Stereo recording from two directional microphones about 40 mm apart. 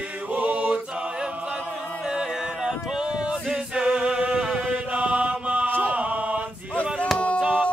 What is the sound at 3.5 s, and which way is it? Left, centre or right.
A capella, right.